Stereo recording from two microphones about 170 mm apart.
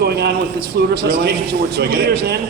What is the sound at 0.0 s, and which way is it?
A man's voice, 75° right (ahead or behind).